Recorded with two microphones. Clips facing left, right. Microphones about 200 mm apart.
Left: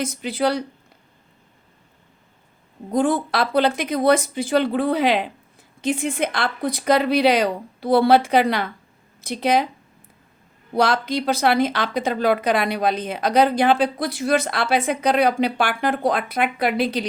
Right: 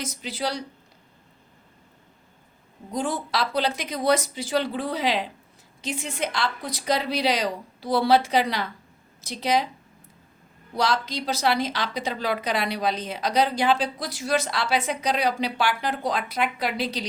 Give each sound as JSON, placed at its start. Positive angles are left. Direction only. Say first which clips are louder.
{"t": 0.0, "sound": "speech", "louder": "left 8 dB", "side_deg": 55}
{"t": 2.9, "sound": "speech", "louder": "left 7 dB", "side_deg": 55}
{"t": 10.8, "sound": "speech", "louder": "left 5 dB", "side_deg": 55}